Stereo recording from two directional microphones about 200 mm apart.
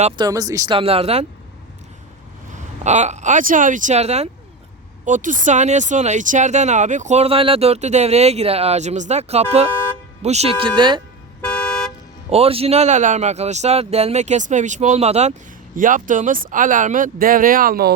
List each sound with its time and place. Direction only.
0.3 s speech: 20° right (ahead or behind)
0.8 s speech: 30° right (ahead or behind)
2.5 s speech: 35° right (ahead or behind)
11.4 s car: 5° left (ahead or behind)
12.3 s speech: 30° right (ahead or behind); by 17.9 s 45° right (ahead or behind)